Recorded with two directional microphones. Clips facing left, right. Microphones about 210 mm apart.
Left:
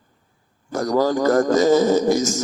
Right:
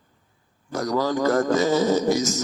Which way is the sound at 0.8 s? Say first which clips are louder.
Left 4 dB; 45° left (ahead or behind).